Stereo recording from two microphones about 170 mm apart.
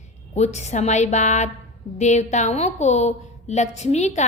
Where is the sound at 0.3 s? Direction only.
40° left (ahead or behind).